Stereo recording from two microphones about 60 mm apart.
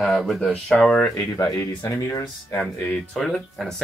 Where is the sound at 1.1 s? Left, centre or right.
Left.